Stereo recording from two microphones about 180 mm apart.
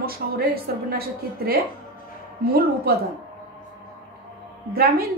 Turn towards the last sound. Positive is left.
turn(degrees=-55)  # may be behind; listen again after turning